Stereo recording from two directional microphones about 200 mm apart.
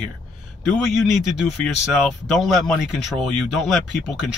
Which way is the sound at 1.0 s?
Centre (ahead or behind).